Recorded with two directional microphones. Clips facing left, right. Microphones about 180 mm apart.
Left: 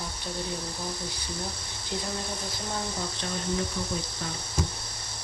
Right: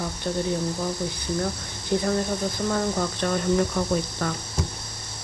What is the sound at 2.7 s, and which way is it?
Speech, 65° right (ahead or behind).